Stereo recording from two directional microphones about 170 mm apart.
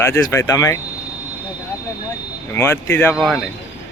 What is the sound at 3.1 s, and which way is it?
Speech, centre (ahead or behind).